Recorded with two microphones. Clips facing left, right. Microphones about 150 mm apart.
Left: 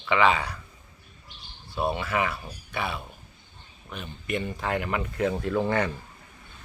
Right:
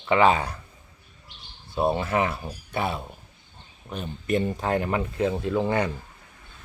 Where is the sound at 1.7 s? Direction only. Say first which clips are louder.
Right 4 dB; 30° right (ahead or behind).